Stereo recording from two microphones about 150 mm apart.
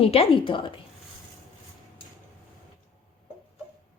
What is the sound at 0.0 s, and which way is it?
Speech, 40° left (ahead or behind).